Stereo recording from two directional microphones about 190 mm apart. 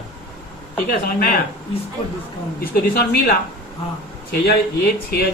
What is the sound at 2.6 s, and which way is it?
Speech, 55° left (ahead or behind).